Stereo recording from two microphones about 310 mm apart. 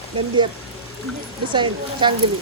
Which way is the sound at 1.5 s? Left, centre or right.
Centre.